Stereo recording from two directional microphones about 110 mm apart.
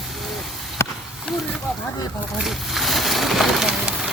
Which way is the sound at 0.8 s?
25° left (ahead or behind).